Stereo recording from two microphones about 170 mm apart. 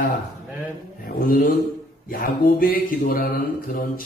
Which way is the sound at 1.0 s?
55° left (ahead or behind).